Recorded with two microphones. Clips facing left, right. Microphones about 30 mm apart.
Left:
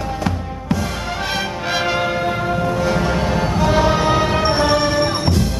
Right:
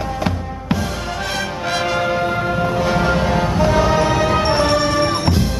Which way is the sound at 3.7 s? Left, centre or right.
Centre.